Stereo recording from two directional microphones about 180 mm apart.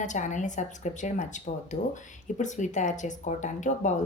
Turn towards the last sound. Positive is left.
turn(degrees=40)  # may be behind; listen again after turning